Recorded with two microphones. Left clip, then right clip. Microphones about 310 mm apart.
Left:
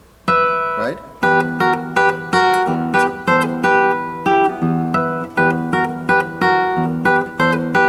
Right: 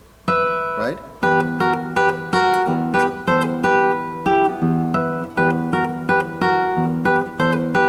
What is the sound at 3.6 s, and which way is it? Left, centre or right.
Guitar, centre.